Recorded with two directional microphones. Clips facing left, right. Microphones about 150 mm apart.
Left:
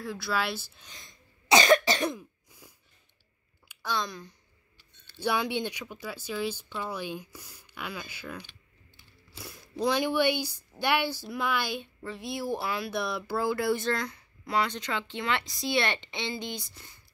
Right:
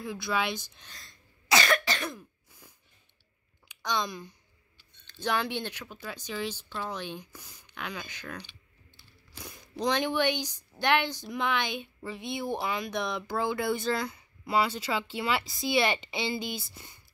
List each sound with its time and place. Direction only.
0.0 s speech: centre (ahead or behind)
0.9 s cough: 20° left (ahead or behind)
2.1 s throat clearing: 10° left (ahead or behind)
3.6 s speech: 5° left (ahead or behind)
5.0 s speech: 10° left (ahead or behind)